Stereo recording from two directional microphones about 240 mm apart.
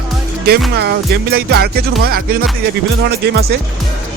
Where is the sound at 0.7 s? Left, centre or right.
Right.